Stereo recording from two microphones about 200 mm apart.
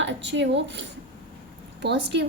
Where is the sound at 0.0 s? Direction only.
60° right (ahead or behind).